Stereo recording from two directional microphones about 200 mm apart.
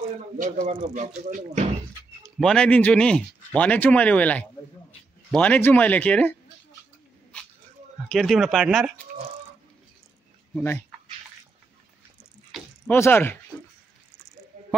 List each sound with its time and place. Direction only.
0.4 s speech: 35° right (ahead or behind)
2.2 s speech: 5° left (ahead or behind)
8.1 s speech: centre (ahead or behind)
10.5 s speech: 10° left (ahead or behind)
12.5 s a sound: 10° left (ahead or behind)